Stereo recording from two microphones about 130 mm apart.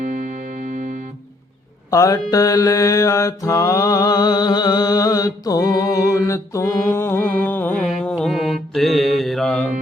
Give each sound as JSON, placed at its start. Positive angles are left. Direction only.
{"t": 1.9, "sound": "mantra", "side_deg": 25}
{"t": 8.0, "sound": "mantra", "side_deg": 0}
{"t": 8.7, "sound": "music", "side_deg": 0}